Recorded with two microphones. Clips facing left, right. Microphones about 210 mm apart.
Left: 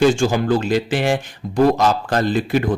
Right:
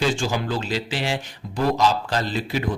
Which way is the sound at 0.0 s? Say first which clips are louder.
Left 8 dB; 50° left (ahead or behind).